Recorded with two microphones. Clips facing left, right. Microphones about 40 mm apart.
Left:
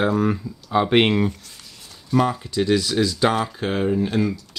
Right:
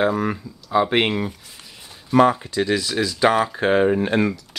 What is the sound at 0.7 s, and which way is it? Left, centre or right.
Speech, centre.